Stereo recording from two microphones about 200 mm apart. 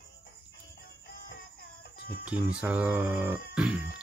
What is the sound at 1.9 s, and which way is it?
Music, 50° left (ahead or behind).